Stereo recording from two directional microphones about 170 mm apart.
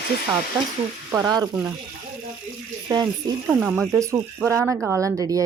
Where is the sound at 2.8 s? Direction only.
20° right (ahead or behind).